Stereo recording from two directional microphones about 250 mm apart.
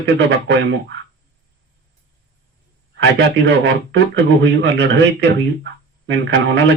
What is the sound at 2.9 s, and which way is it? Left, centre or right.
A man's voice, right.